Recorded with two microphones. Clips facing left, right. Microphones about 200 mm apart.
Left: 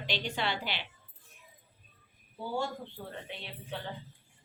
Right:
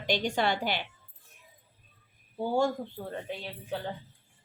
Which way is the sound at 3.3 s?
40° right (ahead or behind).